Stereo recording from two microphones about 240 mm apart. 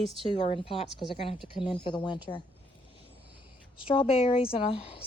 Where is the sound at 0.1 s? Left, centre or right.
Right.